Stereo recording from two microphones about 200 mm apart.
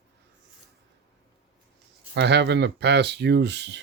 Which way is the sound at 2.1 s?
55° right (ahead or behind).